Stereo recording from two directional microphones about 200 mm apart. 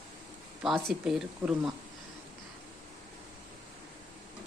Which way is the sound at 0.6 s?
Centre (ahead or behind).